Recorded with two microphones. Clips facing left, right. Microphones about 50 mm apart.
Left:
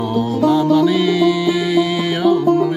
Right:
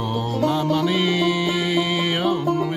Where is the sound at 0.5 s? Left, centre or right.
Right.